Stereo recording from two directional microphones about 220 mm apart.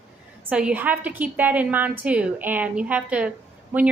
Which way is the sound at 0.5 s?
5° right (ahead or behind).